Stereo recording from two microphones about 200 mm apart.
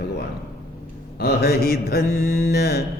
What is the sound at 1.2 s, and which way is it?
Mantra, 50° left (ahead or behind).